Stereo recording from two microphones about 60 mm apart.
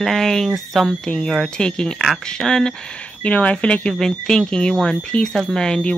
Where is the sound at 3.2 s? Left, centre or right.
Left.